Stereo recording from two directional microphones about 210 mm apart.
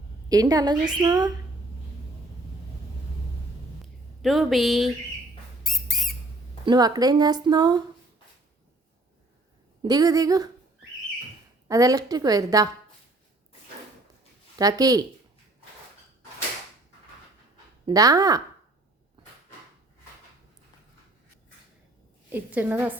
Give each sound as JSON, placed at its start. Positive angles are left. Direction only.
{"t": 0.3, "sound": "speech", "side_deg": -15}
{"t": 4.2, "sound": "a woman's voice", "side_deg": 0}
{"t": 5.6, "sound": "a sound", "side_deg": 0}
{"t": 6.7, "sound": "speech", "side_deg": -20}
{"t": 9.8, "sound": "a woman's voice", "side_deg": -20}
{"t": 11.7, "sound": "a woman's voice", "side_deg": -15}
{"t": 14.6, "sound": "a woman's voice", "side_deg": -15}
{"t": 17.8, "sound": "a woman's voice", "side_deg": -15}
{"t": 22.3, "sound": "a woman's voice", "side_deg": -10}